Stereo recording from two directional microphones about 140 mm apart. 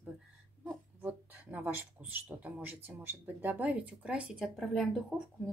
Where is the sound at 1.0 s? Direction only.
10° right (ahead or behind).